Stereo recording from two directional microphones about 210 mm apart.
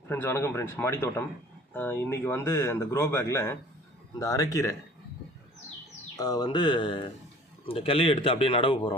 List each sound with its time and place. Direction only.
0.1 s speech: 10° left (ahead or behind)
6.1 s a man's voice: 20° left (ahead or behind)